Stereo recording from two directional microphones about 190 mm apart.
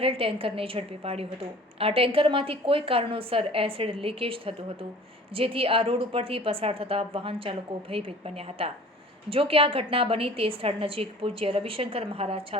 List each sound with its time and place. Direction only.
0.0 s a woman's voice: 30° right (ahead or behind)